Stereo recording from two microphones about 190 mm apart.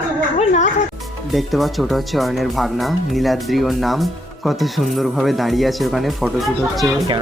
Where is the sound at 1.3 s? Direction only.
Centre (ahead or behind).